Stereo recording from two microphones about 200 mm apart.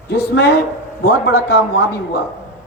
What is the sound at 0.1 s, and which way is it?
A woman's voice, 55° left (ahead or behind).